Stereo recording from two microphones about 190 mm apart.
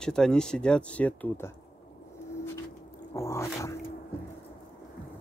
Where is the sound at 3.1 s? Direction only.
15° left (ahead or behind).